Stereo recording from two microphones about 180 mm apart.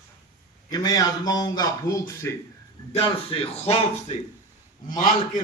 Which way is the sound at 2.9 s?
30° left (ahead or behind).